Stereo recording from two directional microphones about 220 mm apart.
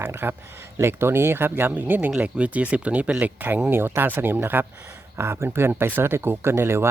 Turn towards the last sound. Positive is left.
turn(degrees=-10)  # may be behind; listen again after turning